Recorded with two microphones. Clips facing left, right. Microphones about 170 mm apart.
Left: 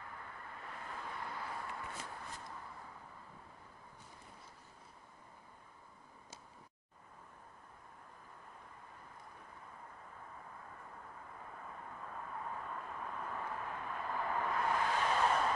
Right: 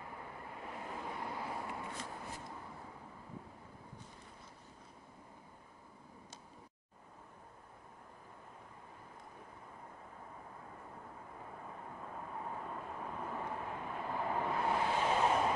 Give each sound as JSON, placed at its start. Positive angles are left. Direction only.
{"t": 0.0, "sound": "vehicle", "side_deg": -20}
{"t": 12.0, "sound": "vehicle", "side_deg": -20}